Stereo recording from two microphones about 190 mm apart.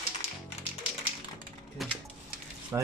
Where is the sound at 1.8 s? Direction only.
Centre (ahead or behind).